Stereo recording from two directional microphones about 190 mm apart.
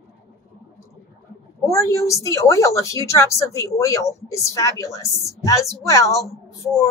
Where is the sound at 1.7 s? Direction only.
15° left (ahead or behind).